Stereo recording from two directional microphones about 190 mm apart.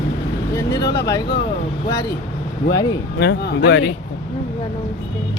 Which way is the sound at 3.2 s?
60° left (ahead or behind).